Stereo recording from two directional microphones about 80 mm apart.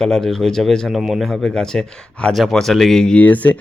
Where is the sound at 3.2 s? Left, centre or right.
Left.